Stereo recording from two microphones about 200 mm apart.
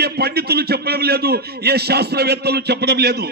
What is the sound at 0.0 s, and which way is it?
A man's voice, 55° right (ahead or behind).